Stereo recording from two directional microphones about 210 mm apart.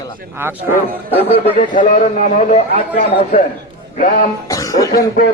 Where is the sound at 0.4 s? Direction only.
10° right (ahead or behind).